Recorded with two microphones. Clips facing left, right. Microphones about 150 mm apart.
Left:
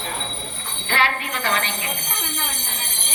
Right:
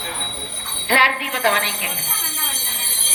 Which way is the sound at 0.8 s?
90° right.